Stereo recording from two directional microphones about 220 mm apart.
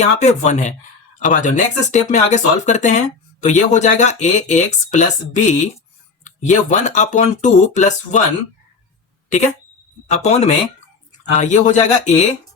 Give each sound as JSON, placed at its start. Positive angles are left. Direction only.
{"t": 0.0, "sound": "speech", "side_deg": 30}
{"t": 10.1, "sound": "speech", "side_deg": 30}